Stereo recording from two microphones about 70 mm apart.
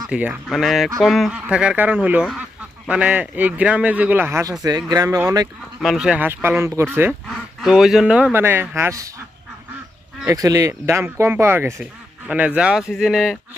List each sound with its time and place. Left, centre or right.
0.1 s speech: centre
0.4 s speech: centre
1.3 s a man's voice: centre
4.9 s speech: right
5.8 s speech: centre
6.1 s a man's voice: right
6.6 s speech: right
7.3 s speech: centre
8.3 s speech: right
8.7 s speech: right
10.2 s speech: right
10.8 s speech: right
12.3 s speech: centre